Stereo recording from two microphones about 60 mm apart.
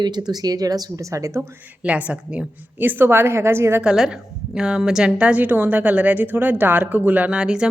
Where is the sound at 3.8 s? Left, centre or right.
Centre.